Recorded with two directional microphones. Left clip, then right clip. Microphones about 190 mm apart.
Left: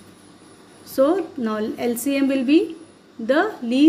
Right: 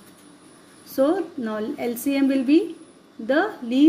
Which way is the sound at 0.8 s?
15° left (ahead or behind).